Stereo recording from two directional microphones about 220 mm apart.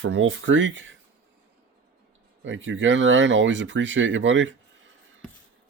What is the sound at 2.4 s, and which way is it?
Speech, 60° right (ahead or behind).